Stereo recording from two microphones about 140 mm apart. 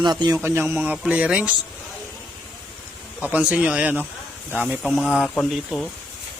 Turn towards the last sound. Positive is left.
turn(degrees=0)  # may be behind; listen again after turning